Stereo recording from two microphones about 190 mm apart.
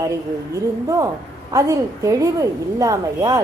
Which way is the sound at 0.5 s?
15° right (ahead or behind).